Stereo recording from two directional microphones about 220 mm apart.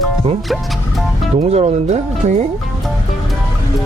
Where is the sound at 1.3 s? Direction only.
30° right (ahead or behind).